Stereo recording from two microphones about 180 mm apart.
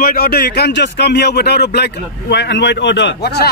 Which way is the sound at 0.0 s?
55° left (ahead or behind).